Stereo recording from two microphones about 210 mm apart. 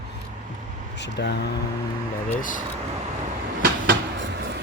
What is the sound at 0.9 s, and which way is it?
Speech, 55° left (ahead or behind).